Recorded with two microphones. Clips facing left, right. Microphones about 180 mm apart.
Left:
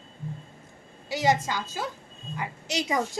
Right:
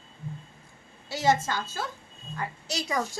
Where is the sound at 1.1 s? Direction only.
15° left (ahead or behind).